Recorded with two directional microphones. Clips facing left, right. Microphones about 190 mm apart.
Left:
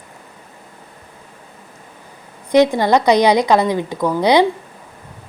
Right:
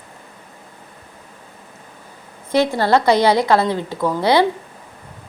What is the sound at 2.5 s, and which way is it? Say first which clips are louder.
A woman's voice: left 3 dB; 15° left (ahead or behind).